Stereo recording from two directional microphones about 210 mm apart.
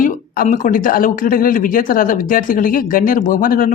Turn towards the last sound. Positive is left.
turn(degrees=40)  # may be behind; listen again after turning